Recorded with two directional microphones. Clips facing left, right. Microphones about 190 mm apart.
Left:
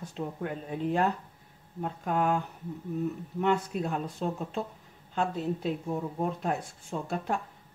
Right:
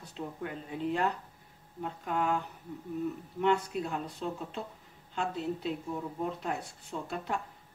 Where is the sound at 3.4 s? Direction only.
50° left (ahead or behind).